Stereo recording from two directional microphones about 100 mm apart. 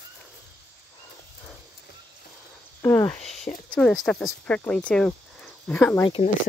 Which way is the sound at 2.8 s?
25° left (ahead or behind).